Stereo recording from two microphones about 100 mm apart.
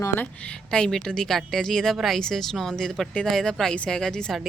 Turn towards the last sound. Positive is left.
turn(degrees=5)  # may be behind; listen again after turning